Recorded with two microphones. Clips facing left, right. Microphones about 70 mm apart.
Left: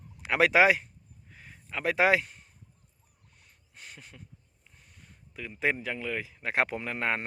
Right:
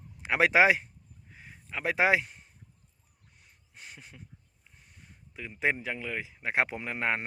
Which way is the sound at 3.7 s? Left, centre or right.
Right.